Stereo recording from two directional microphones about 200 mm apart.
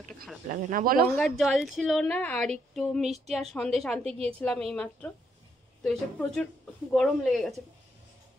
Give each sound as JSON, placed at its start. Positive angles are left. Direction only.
{"t": 0.5, "sound": "speech", "side_deg": -45}
{"t": 1.2, "sound": "a woman's voice", "side_deg": 0}